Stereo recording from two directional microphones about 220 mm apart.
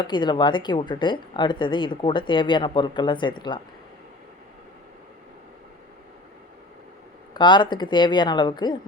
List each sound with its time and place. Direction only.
0.0 s speech: 20° left (ahead or behind)
7.3 s speech: 20° left (ahead or behind)